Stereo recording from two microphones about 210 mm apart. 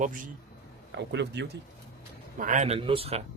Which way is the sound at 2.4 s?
35° right (ahead or behind).